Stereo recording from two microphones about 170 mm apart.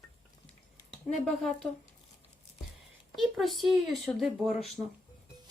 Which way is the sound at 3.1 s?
Centre (ahead or behind).